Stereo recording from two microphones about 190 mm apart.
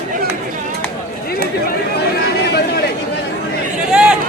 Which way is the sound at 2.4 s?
60° left (ahead or behind).